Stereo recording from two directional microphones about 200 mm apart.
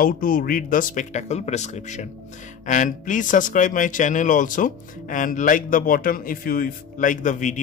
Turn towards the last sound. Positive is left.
turn(degrees=40)  # may be behind; listen again after turning